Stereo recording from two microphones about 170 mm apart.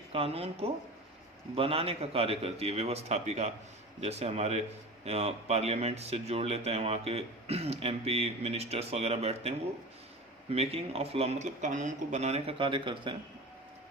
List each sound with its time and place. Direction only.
0.1 s a man's voice: 35° right (ahead or behind)